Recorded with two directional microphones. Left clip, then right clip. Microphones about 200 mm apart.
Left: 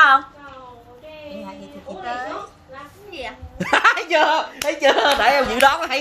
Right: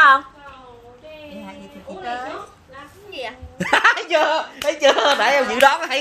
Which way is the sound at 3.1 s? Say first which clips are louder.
Right 2 dB; 35° right (ahead or behind).